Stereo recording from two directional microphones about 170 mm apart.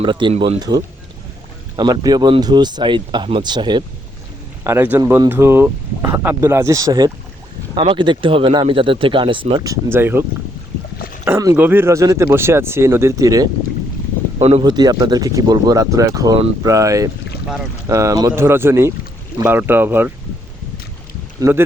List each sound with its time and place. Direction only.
0.0 s speech: 30° right (ahead or behind)
4.6 s speech: 15° right (ahead or behind); by 9.7 s 30° right (ahead or behind)
9.9 s speech: 15° right (ahead or behind)
11.3 s speech: 15° right (ahead or behind)